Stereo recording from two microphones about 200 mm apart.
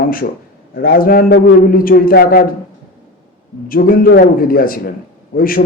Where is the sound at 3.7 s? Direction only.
45° left (ahead or behind).